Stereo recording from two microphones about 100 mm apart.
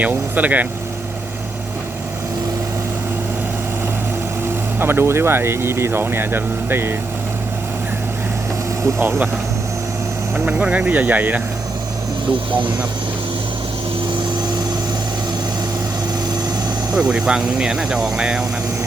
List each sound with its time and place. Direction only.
0.0 s speech: 15° right (ahead or behind)
4.8 s speech: 20° right (ahead or behind)
9.0 s speech: 20° right (ahead or behind)
10.4 s speech: 10° right (ahead or behind)
16.9 s speech: 10° right (ahead or behind)